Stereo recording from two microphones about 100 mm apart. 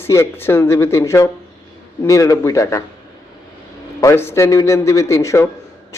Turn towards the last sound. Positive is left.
turn(degrees=30)  # may be behind; listen again after turning